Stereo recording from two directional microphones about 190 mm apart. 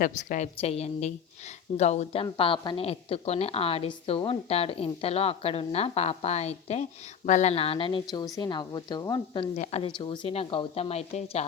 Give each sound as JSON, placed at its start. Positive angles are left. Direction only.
{"t": 0.0, "sound": "a woman's voice", "side_deg": 40}
{"t": 2.2, "sound": "a woman's voice", "side_deg": 25}